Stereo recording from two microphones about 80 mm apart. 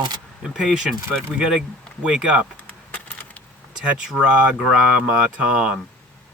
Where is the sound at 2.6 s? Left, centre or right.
Centre.